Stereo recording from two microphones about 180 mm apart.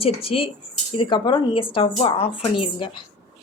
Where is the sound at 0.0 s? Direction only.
30° left (ahead or behind).